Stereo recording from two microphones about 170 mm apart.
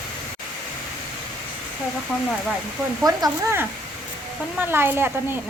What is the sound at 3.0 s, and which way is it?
Speech, 20° right (ahead or behind).